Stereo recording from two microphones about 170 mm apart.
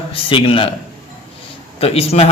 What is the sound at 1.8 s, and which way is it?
Speech, 35° left (ahead or behind).